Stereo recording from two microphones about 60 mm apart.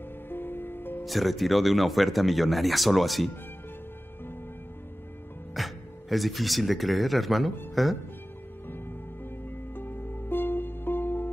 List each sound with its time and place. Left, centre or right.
0.3 s music: left
1.0 s speech: centre
5.5 s speech: centre
9.8 s music: left